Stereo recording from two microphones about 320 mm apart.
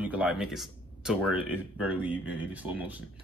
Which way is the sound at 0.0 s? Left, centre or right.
Centre.